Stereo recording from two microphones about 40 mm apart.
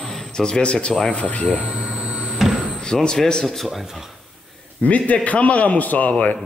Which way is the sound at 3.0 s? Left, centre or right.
Centre.